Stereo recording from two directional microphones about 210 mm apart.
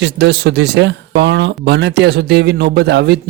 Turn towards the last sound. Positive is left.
turn(degrees=-55)  # may be behind; listen again after turning